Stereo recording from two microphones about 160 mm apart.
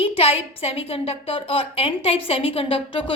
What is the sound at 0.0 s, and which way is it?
A woman's voice, 40° left (ahead or behind).